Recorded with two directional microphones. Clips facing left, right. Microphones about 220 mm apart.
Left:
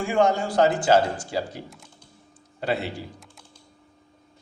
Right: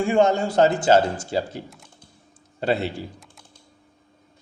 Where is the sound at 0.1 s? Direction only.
25° right (ahead or behind).